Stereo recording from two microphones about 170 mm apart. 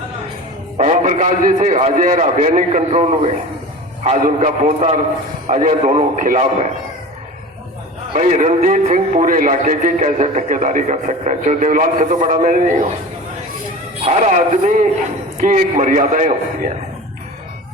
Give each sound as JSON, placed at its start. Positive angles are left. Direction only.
{"t": 0.8, "sound": "a man's voice", "side_deg": -45}
{"t": 8.1, "sound": "speech", "side_deg": -45}
{"t": 14.0, "sound": "speech", "side_deg": -40}